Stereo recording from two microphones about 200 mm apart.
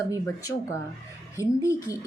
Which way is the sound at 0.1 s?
15° left (ahead or behind).